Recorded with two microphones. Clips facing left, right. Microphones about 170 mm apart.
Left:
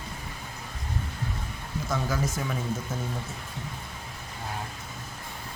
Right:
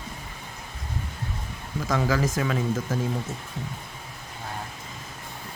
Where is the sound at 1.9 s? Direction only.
90° right.